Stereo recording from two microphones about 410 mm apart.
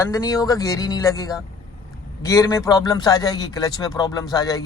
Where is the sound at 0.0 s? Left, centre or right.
Centre.